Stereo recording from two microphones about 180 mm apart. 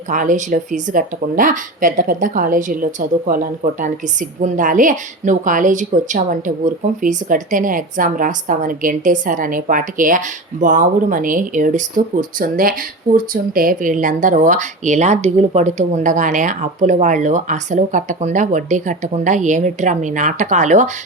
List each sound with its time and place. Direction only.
0.1 s a woman's voice: 45° right (ahead or behind)